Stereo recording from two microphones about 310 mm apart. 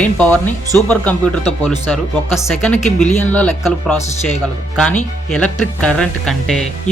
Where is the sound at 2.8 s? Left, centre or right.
Left.